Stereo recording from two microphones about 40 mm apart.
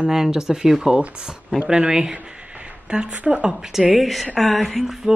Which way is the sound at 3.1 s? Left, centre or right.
Right.